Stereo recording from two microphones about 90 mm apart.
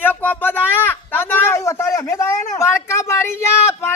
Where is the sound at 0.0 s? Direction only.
20° left (ahead or behind).